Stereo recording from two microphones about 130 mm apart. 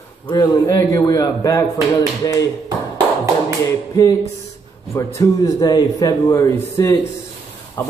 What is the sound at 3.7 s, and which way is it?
Speech, 25° left (ahead or behind).